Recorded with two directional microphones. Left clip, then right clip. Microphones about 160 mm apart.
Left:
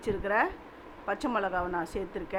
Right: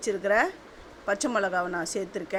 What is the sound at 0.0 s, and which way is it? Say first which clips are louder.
A woman's voice: right 4 dB; 20° right (ahead or behind).